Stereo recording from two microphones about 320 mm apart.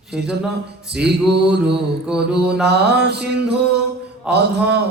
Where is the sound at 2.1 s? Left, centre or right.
Right.